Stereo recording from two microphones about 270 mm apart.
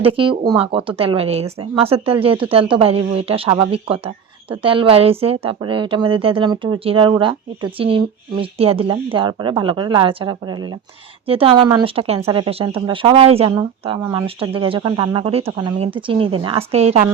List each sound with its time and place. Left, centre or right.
0.0 s speech: centre